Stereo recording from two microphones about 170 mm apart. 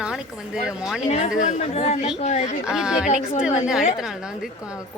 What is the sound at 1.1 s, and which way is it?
Speech, 45° left (ahead or behind).